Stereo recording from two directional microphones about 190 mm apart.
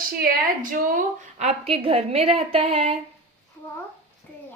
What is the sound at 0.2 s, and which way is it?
A woman's voice, 45° right (ahead or behind).